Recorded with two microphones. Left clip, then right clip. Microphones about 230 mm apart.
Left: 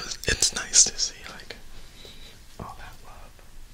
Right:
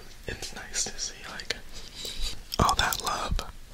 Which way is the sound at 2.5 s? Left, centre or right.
Right.